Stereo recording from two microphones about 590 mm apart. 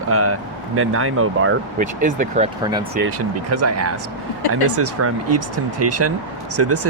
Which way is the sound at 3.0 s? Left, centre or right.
Right.